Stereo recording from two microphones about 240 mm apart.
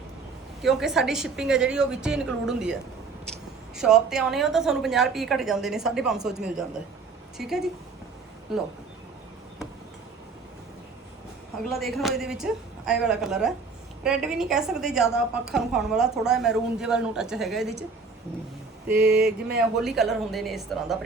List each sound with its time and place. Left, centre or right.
0.6 s a woman's voice: centre
3.8 s a woman's voice: centre
11.7 s a woman's voice: centre
18.9 s mantra: right
19.5 s a woman's voice: centre